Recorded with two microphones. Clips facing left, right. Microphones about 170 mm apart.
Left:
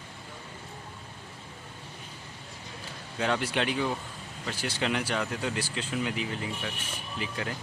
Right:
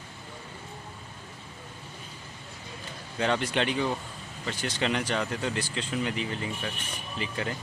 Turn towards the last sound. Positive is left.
turn(degrees=0)  # may be behind; listen again after turning